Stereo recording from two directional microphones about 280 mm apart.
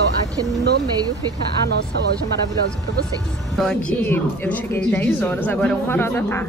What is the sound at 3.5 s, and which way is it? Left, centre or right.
A woman's voice, centre.